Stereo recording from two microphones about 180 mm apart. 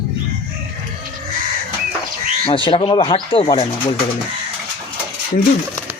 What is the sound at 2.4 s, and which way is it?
Speech, 25° left (ahead or behind).